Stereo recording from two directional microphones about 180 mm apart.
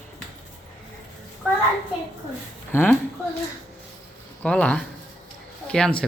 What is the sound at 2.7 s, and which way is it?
Speech, 10° left (ahead or behind).